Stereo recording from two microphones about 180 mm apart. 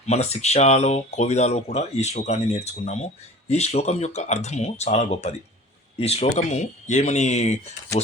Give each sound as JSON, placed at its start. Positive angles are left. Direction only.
{"t": 0.0, "sound": "speech", "side_deg": 40}